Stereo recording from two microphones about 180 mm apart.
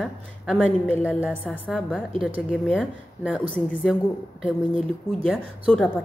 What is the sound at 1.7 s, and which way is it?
Speech, centre (ahead or behind).